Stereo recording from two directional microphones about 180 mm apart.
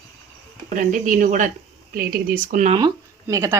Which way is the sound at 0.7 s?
45° right (ahead or behind).